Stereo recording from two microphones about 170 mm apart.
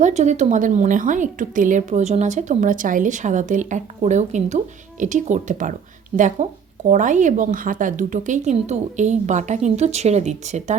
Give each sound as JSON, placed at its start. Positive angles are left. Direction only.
{"t": 0.0, "sound": "a woman's voice", "side_deg": -45}